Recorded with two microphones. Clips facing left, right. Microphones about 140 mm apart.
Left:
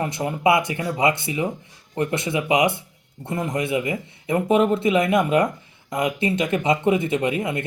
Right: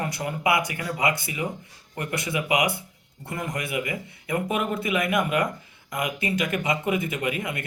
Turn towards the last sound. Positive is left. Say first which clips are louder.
# left 5 dB
turn(degrees=30)  # may be behind; listen again after turning